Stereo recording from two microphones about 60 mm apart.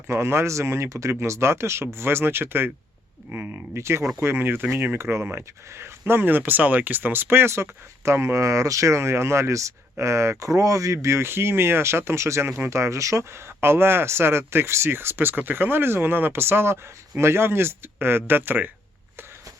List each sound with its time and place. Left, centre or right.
0.1 s speech: right
3.8 s speech: right
4.9 s speech: right
12.5 s speech: right
12.7 s speech: right